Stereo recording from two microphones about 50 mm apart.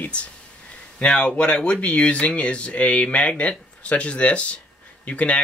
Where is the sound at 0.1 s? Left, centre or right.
Left.